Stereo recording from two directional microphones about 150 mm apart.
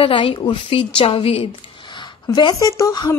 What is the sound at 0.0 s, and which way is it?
A woman's voice, 35° left (ahead or behind).